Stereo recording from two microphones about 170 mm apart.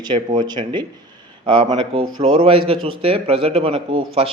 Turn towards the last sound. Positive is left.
turn(degrees=-30)  # may be behind; listen again after turning